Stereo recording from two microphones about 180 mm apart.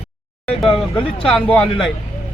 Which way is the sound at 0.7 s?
30° left (ahead or behind).